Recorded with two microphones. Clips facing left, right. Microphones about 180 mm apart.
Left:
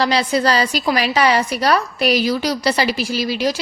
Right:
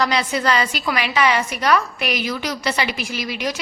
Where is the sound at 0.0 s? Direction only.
35° left (ahead or behind).